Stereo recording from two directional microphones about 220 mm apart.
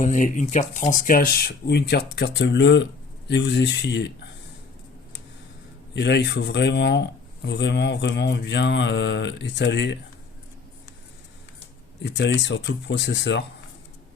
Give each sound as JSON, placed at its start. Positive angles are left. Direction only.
{"t": 0.0, "sound": "speech", "side_deg": 35}
{"t": 5.9, "sound": "speech", "side_deg": 50}
{"t": 12.1, "sound": "speech", "side_deg": 50}